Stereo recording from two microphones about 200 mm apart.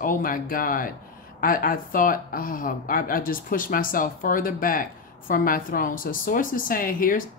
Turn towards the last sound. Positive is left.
turn(degrees=45)  # may be behind; listen again after turning